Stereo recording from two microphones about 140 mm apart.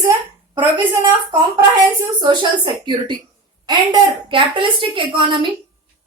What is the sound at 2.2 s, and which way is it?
A woman's voice, 35° right (ahead or behind).